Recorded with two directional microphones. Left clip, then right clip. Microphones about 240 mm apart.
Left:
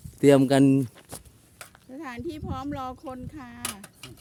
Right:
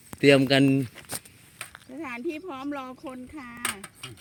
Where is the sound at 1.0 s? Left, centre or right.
Right.